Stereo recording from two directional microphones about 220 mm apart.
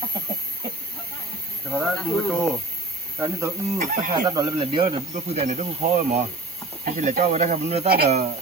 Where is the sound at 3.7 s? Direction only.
35° right (ahead or behind).